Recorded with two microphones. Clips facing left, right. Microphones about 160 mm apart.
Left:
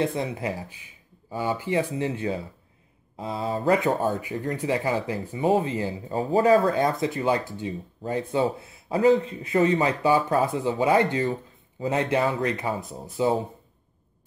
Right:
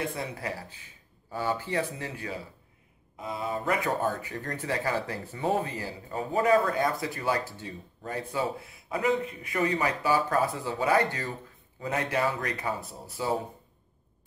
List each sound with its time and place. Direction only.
0.0 s speech: 20° left (ahead or behind)